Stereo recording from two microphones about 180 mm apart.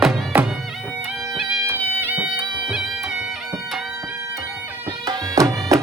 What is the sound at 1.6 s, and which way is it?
Music, 10° right (ahead or behind).